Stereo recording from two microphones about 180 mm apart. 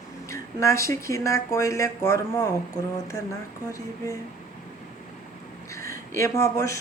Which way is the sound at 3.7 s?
20° left (ahead or behind).